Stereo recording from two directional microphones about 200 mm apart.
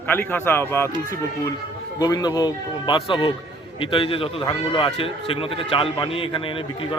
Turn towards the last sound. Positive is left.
turn(degrees=25)  # may be behind; listen again after turning